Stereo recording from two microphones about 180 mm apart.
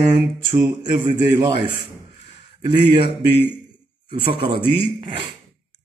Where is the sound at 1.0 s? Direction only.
25° right (ahead or behind).